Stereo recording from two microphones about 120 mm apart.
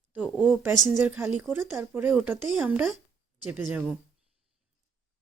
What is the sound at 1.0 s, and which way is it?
A woman's voice, 15° right (ahead or behind).